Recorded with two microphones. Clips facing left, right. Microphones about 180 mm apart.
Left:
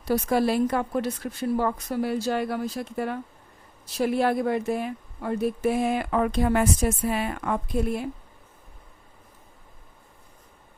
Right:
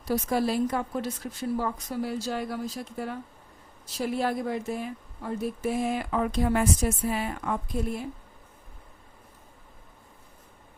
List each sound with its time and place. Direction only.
0.0 s speech: 65° left (ahead or behind)